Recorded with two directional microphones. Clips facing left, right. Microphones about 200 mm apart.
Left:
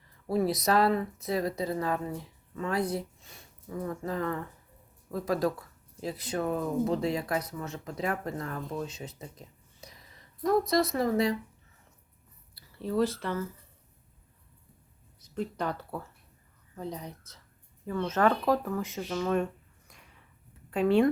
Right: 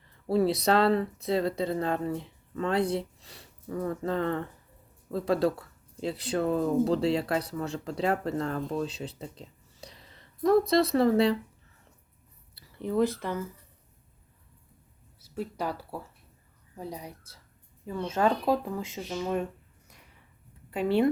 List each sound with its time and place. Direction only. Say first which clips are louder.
0.3 s speech: right 3 dB; 30° right (ahead or behind)
9.3 s a sound: right 3 dB; 30° right (ahead or behind)
10.8 s speech: right 4 dB; 30° right (ahead or behind)
12.5 s speech: right 1 dB; 15° right (ahead or behind)
15.2 s speech: even; 5° right (ahead or behind)
20.7 s speech: left 1 dB; 5° right (ahead or behind)